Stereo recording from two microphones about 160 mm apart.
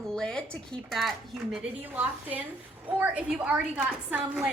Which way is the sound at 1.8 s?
10° right (ahead or behind).